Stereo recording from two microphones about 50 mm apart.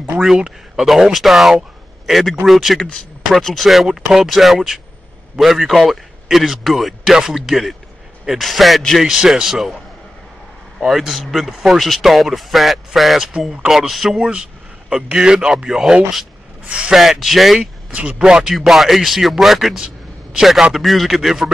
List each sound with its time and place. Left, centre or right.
0.8 s a man's voice: centre
9.0 s a man's voice: centre
10.9 s speech: centre
11.8 s a man's voice: centre
14.3 s a man's voice: centre
16.9 s a man's voice: centre
17.6 s speech: right
18.7 s a man's voice: centre